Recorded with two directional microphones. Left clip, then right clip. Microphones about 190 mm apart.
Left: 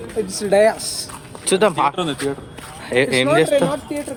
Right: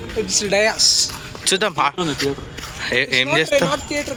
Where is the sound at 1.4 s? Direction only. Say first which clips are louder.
Left 2 dB; 5° left (ahead or behind).